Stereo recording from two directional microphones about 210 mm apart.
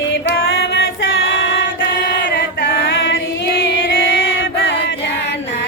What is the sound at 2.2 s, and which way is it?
Chant, 55° left (ahead or behind).